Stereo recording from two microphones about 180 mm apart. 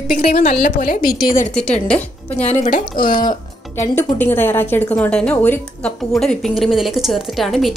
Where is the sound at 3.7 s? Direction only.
15° left (ahead or behind).